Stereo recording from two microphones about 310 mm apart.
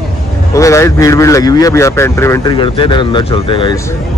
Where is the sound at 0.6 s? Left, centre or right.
Centre.